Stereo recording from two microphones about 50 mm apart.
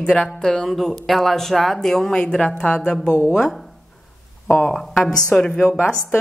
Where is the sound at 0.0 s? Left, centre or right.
Centre.